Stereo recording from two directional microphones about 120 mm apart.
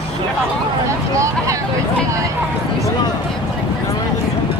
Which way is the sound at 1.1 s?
25° right (ahead or behind).